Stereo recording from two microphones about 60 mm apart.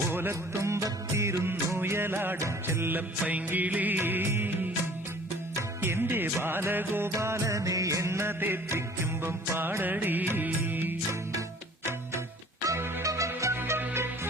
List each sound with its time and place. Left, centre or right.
0.1 s music: right
0.9 s music of bollywood: right
1.5 s music: right
3.2 s music: right
5.8 s music: right
7.2 s music: right
12.7 s music: right
13.6 s music: right